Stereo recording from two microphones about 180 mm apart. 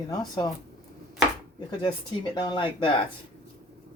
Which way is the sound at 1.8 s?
25° left (ahead or behind).